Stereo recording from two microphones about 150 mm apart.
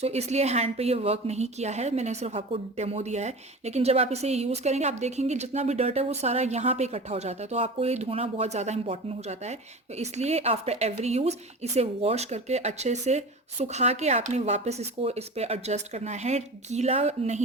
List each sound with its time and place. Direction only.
0.0 s a woman's voice: 45° right (ahead or behind)